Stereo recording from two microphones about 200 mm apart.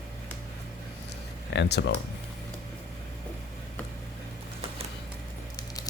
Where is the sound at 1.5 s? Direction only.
55° left (ahead or behind).